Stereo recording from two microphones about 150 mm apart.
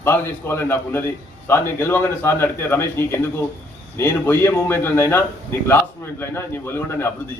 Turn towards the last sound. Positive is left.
turn(degrees=15)  # may be behind; listen again after turning